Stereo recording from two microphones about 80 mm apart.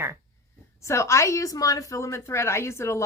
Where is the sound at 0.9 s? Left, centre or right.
Left.